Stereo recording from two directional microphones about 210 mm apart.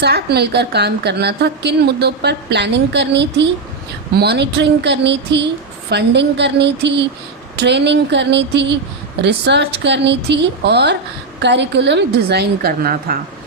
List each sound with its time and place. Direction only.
0.0 s a woman's voice: 50° right (ahead or behind)